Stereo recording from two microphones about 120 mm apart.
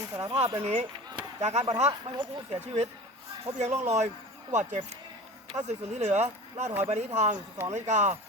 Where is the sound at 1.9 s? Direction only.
40° right (ahead or behind).